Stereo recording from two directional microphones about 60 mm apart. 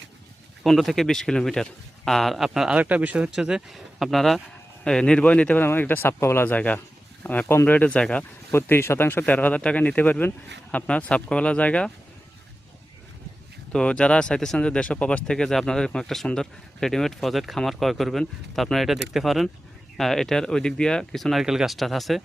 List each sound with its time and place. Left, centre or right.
0.6 s speech: centre
2.7 s speech: right
3.3 s speech: centre
4.8 s speech: centre
5.6 s speech: left
7.9 s speech: centre
8.5 s speech: left
9.2 s speech: left
13.7 s speech: centre
21.4 s speech: centre